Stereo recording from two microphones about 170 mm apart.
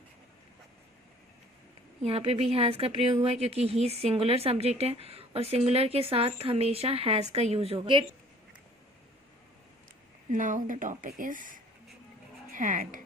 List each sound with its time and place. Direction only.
2.0 s speech: 35° right (ahead or behind)
10.3 s speech: 50° right (ahead or behind)